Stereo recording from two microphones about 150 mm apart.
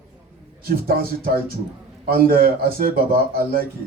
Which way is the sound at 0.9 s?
80° right.